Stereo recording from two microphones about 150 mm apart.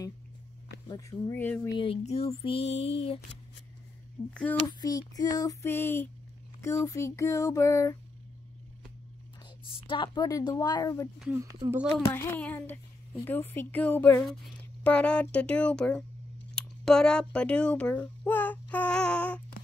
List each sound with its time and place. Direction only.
0.8 s female singing: 25° left (ahead or behind)
1.4 s a woman's voice: 15° left (ahead or behind)
1.8 s a sound: 40° left (ahead or behind)
4.3 s a woman's voice: 5° left (ahead or behind)
4.6 s female singing: 25° left (ahead or behind)
9.7 s female singing: 35° left (ahead or behind)
12.1 s a woman's voice: 15° left (ahead or behind)
14.2 s a woman's voice: centre (ahead or behind)
16.5 s babbling: 5° left (ahead or behind)